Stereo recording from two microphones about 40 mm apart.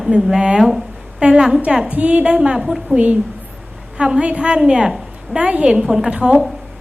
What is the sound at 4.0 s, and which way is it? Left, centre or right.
A woman's voice, right.